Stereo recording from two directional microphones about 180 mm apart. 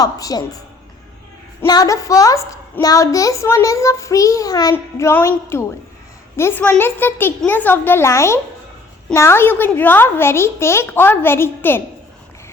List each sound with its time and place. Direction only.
0.0 s a woman's voice: 20° left (ahead or behind)
1.6 s a child's voice: 20° left (ahead or behind)